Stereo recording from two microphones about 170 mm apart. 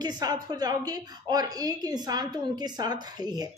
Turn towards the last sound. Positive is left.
turn(degrees=-25)  # may be behind; listen again after turning